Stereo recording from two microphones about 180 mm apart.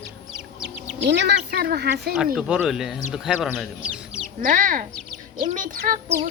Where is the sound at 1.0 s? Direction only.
70° right (ahead or behind).